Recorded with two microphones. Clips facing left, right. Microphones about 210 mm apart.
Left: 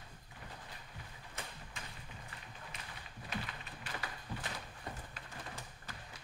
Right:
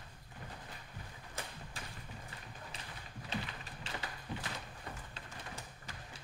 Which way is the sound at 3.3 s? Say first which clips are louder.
Right 2 dB; 25° right (ahead or behind).